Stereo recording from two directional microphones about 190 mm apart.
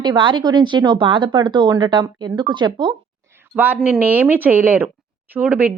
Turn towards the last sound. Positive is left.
turn(degrees=-5)  # may be behind; listen again after turning